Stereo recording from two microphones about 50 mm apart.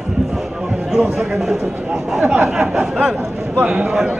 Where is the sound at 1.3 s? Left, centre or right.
Centre.